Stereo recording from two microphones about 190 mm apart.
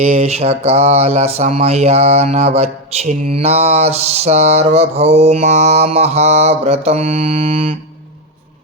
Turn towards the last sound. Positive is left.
turn(degrees=-30)  # may be behind; listen again after turning